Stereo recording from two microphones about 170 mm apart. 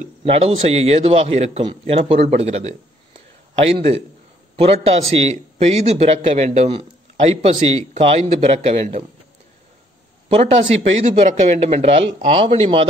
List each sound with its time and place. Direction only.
0.2 s a man's voice: 35° right (ahead or behind)
10.2 s a man's voice: 35° right (ahead or behind)